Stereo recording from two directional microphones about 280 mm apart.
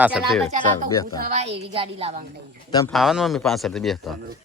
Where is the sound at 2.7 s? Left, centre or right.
Centre.